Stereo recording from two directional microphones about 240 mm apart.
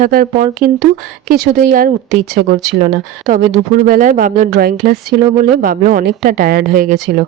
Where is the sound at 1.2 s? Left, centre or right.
Right.